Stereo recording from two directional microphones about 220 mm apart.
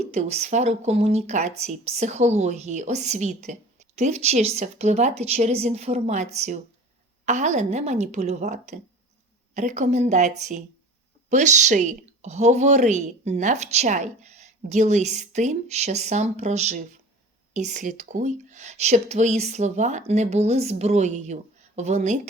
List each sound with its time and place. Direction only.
0.0 s speech: 30° right (ahead or behind)